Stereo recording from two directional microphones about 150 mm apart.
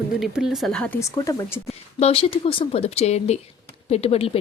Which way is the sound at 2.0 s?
40° left (ahead or behind).